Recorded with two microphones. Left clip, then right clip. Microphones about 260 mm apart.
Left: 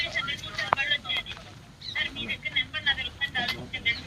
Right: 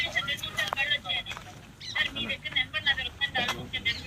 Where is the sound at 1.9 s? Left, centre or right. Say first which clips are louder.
Right 1 dB; centre.